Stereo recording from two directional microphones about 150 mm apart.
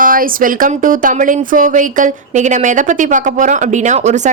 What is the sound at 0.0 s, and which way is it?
A woman's voice, 65° right (ahead or behind).